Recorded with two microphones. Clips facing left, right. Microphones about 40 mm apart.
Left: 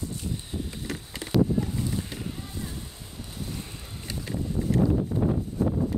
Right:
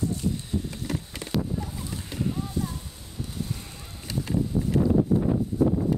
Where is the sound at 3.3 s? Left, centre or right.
Centre.